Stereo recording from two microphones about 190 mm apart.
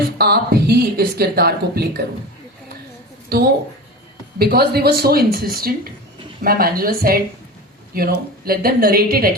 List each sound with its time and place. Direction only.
0.0 s speech: 55° right (ahead or behind)
3.3 s a woman's voice: 55° right (ahead or behind)